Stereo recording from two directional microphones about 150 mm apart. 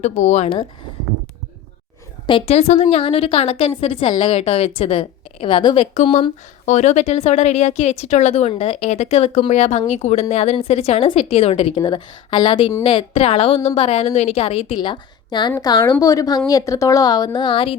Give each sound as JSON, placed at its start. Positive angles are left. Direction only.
{"t": 0.0, "sound": "speech", "side_deg": 50}
{"t": 2.5, "sound": "a woman's voice", "side_deg": 45}